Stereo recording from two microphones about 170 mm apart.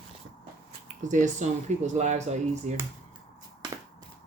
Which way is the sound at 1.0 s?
45° right (ahead or behind).